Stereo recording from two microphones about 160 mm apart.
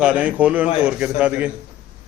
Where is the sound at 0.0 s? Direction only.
10° right (ahead or behind).